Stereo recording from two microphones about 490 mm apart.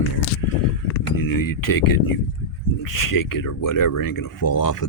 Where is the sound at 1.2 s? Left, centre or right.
Left.